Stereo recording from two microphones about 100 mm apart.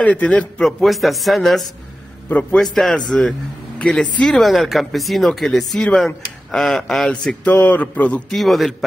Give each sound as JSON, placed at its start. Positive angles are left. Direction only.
{"t": 0.0, "sound": "a man's voice", "side_deg": 15}
{"t": 8.3, "sound": "a man's voice", "side_deg": 0}